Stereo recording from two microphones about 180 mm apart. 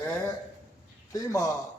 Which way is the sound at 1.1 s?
15° left (ahead or behind).